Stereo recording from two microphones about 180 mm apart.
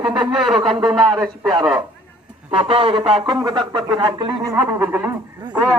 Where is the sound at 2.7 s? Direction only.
30° right (ahead or behind).